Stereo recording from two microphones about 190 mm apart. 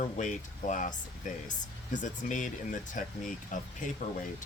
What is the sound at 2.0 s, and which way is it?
Speech, 40° left (ahead or behind).